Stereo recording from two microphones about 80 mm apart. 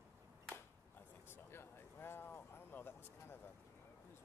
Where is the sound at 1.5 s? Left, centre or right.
Left.